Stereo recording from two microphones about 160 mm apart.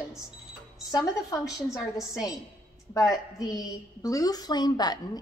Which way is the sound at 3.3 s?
25° left (ahead or behind).